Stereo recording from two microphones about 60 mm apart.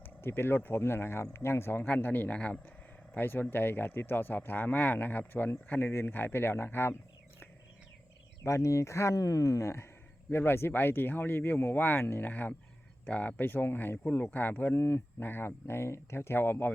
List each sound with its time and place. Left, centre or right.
0.0 s speech: left
3.2 s speech: left
5.9 s speech: left
8.4 s speech: left
10.3 s speech: left